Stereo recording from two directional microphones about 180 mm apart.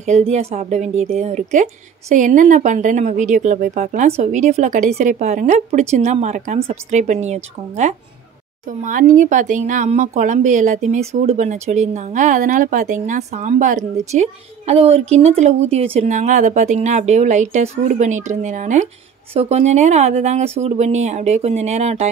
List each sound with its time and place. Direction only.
0.0 s a woman's voice: 40° right (ahead or behind)
8.6 s a woman's voice: 45° right (ahead or behind)